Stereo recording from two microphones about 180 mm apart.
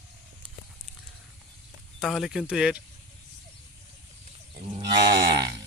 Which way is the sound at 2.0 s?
Centre (ahead or behind).